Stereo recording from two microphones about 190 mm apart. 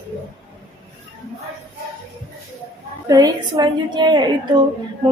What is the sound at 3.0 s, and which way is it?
A woman's voice, 20° right (ahead or behind).